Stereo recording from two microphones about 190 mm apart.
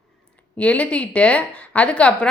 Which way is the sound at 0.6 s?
5° left (ahead or behind).